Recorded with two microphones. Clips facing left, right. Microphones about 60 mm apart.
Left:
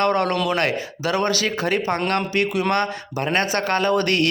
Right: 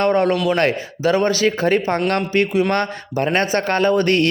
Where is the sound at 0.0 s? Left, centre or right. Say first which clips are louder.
Right 3 dB; right.